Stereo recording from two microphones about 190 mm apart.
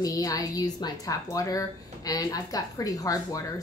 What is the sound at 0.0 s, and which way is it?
A woman's voice, 20° left (ahead or behind).